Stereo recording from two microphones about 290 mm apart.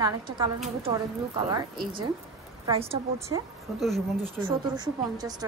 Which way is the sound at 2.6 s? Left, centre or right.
Centre.